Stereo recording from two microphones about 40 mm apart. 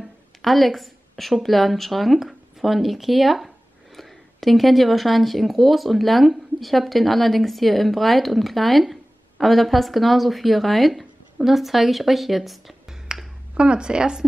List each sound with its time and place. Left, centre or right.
0.4 s a woman's voice: centre
13.1 s finger snapping: centre
13.6 s a woman's voice: right